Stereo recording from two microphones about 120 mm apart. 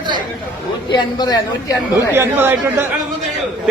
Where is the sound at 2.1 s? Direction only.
20° right (ahead or behind).